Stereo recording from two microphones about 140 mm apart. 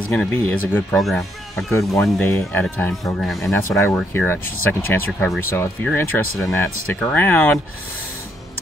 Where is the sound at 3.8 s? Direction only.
15° left (ahead or behind).